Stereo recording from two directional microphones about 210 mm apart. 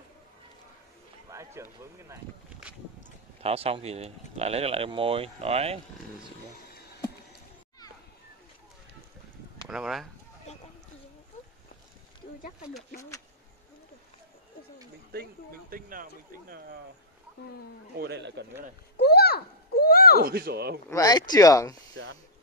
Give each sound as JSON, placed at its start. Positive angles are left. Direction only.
{"t": 1.3, "sound": "speech", "side_deg": -10}
{"t": 3.4, "sound": "speech", "side_deg": -30}
{"t": 9.7, "sound": "speech", "side_deg": 0}
{"t": 15.1, "sound": "speech", "side_deg": -45}
{"t": 17.9, "sound": "speech", "side_deg": -50}
{"t": 18.9, "sound": "a sound", "side_deg": 50}
{"t": 20.2, "sound": "speech", "side_deg": -45}
{"t": 20.9, "sound": "speech", "side_deg": 15}
{"t": 22.0, "sound": "speech", "side_deg": -60}